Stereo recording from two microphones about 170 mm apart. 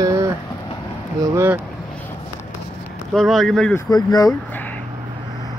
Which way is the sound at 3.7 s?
20° left (ahead or behind).